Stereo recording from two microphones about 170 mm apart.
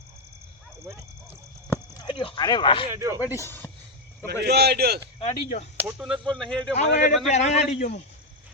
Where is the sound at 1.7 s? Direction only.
25° left (ahead or behind).